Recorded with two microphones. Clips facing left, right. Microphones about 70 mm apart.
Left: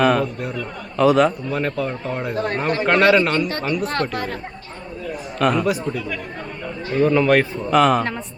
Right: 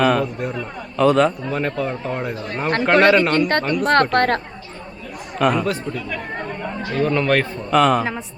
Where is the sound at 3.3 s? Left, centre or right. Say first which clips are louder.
Right 4 dB; right.